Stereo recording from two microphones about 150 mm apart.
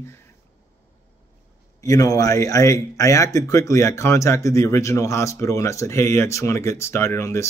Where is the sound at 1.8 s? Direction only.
25° left (ahead or behind).